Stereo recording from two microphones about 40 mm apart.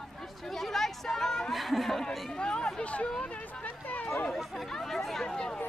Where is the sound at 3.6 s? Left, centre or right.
Left.